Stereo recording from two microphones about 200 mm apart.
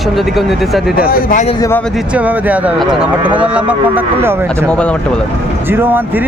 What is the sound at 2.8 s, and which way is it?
Speech, 25° right (ahead or behind).